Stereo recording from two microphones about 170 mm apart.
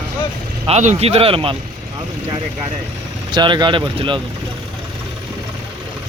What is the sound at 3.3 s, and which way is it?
Speech, 25° right (ahead or behind).